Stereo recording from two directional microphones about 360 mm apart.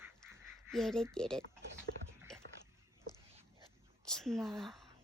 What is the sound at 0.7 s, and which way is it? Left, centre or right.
Speech, centre.